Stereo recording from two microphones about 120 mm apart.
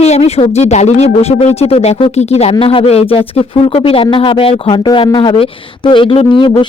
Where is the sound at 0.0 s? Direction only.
60° left (ahead or behind).